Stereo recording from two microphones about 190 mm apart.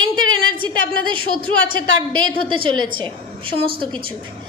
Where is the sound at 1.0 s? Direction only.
25° right (ahead or behind).